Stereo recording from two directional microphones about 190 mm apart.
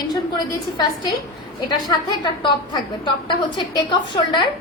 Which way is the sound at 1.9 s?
25° left (ahead or behind).